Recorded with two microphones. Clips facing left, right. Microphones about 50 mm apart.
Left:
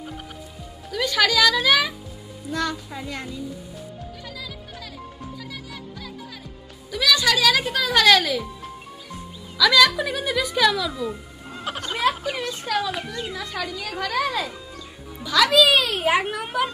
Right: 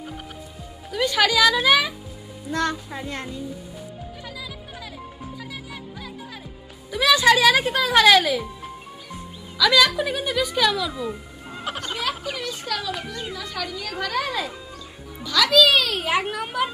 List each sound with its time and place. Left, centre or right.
0.9 s a woman's voice: centre
5.2 s music: centre
6.9 s music: right
9.8 s speech: centre
11.6 s music: centre
12.4 s speech: centre
13.4 s a child's voice: centre
15.3 s a child's voice: centre